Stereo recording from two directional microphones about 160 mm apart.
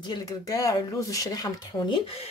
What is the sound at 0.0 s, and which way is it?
Speech, 25° left (ahead or behind).